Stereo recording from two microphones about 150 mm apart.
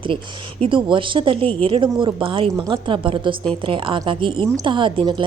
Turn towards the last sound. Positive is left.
turn(degrees=-30)  # may be behind; listen again after turning